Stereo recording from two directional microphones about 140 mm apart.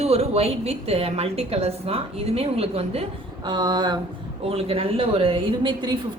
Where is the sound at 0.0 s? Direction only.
45° right (ahead or behind).